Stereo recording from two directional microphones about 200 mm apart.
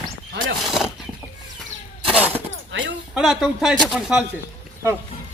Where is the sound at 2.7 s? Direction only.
65° right (ahead or behind).